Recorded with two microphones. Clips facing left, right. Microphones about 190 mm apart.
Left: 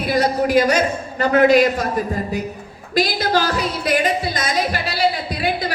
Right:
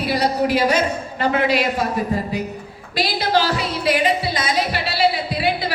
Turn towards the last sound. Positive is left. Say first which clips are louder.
# even
turn(degrees=45)  # may be behind; listen again after turning